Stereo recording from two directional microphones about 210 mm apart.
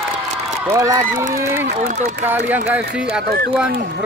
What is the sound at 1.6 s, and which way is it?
Speech, 35° right (ahead or behind).